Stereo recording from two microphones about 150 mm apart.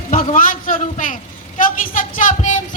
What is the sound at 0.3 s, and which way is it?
Speech, 65° left (ahead or behind).